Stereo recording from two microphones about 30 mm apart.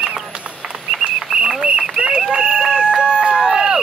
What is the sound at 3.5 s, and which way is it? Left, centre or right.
Run, right.